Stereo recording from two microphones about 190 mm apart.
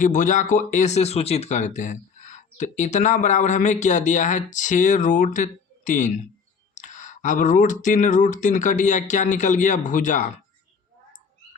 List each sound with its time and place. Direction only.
0.0 s speech: 45° left (ahead or behind)